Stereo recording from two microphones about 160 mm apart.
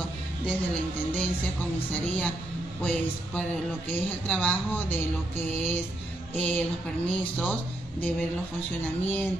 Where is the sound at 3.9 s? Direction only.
10° left (ahead or behind).